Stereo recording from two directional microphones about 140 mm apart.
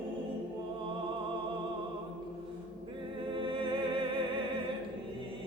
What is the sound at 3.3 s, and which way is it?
Music, 35° right (ahead or behind).